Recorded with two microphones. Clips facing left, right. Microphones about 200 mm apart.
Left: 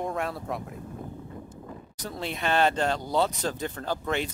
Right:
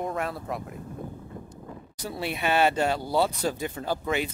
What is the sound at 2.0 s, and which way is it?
Speech, 10° right (ahead or behind).